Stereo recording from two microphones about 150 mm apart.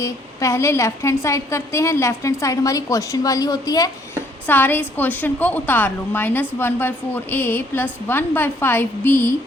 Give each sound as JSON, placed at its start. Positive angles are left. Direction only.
{"t": 0.0, "sound": "a woman's voice", "side_deg": 20}
{"t": 4.4, "sound": "a woman's voice", "side_deg": 15}